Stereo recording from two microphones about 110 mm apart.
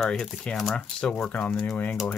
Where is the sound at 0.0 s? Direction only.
5° left (ahead or behind).